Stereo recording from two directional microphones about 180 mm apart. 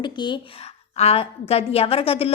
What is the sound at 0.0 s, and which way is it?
A woman's voice, 25° left (ahead or behind).